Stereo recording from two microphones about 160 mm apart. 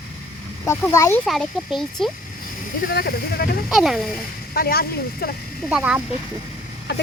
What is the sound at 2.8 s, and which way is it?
Speech, 75° left (ahead or behind).